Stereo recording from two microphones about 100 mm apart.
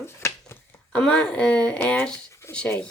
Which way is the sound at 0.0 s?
30° left (ahead or behind).